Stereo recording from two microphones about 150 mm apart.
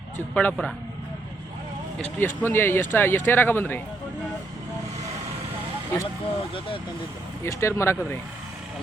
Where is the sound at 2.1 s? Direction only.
15° left (ahead or behind).